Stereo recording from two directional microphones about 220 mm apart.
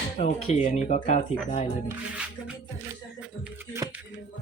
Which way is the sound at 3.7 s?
10° right (ahead or behind).